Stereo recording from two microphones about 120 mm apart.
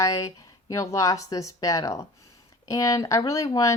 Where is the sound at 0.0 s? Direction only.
30° left (ahead or behind).